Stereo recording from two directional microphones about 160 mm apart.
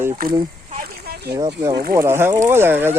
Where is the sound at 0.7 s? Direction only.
70° right (ahead or behind).